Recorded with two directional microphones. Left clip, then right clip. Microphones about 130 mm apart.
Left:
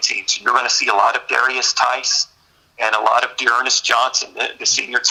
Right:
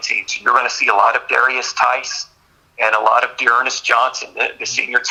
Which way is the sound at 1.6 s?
20° left (ahead or behind).